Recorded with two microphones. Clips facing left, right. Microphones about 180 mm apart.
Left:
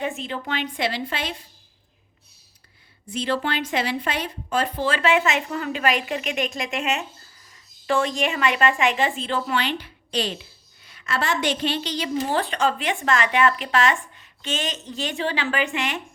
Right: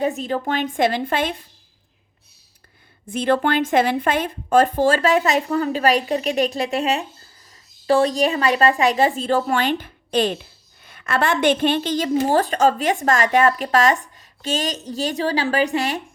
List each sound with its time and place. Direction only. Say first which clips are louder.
0.0 s a woman's voice: right 7 dB; 40° right (ahead or behind)
3.1 s a woman's voice: right 6 dB; 50° right (ahead or behind)